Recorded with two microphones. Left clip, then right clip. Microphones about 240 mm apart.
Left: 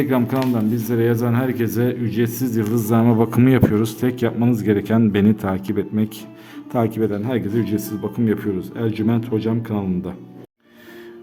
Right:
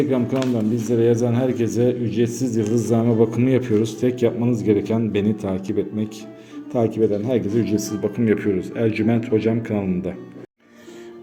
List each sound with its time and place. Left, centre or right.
0.0 s a man's voice: left